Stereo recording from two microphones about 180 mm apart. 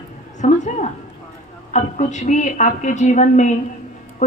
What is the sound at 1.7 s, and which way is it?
A woman's voice, 40° left (ahead or behind).